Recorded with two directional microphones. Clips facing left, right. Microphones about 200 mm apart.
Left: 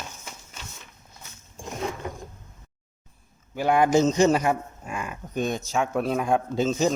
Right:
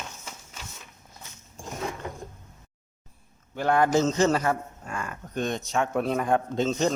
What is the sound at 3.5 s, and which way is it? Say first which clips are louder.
A man's voice: left 2 dB; 10° left (ahead or behind).